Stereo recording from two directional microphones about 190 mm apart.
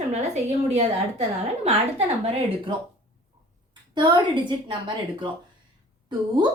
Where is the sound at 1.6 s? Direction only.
35° right (ahead or behind).